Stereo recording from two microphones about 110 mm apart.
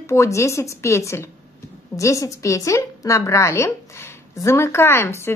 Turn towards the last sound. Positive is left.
turn(degrees=25)  # may be behind; listen again after turning